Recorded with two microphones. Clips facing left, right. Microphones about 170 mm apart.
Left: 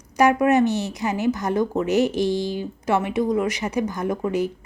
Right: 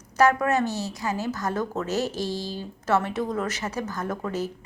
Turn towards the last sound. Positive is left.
turn(degrees=15)  # may be behind; listen again after turning